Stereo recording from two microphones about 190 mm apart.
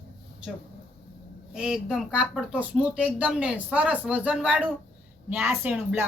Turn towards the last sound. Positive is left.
turn(degrees=-10)  # may be behind; listen again after turning